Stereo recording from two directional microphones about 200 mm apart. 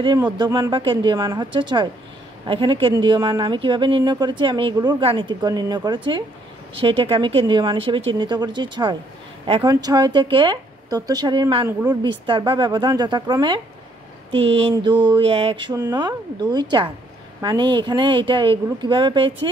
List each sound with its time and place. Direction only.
0.4 s a woman's voice: 20° right (ahead or behind)
14.6 s a woman's voice: 25° right (ahead or behind)